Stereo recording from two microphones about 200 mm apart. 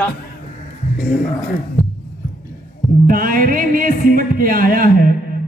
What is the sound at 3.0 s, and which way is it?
A man's voice, 45° right (ahead or behind).